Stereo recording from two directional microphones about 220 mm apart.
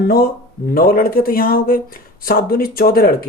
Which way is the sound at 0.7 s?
40° left (ahead or behind).